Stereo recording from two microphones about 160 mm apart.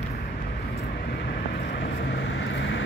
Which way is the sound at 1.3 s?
90° left.